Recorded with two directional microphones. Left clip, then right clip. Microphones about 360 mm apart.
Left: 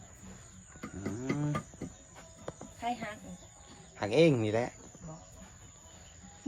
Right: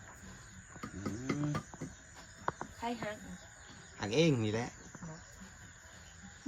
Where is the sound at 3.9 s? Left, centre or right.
Centre.